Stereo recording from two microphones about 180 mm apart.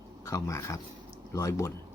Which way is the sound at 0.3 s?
15° left (ahead or behind).